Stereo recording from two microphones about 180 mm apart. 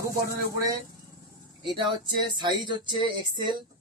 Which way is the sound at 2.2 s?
25° right (ahead or behind).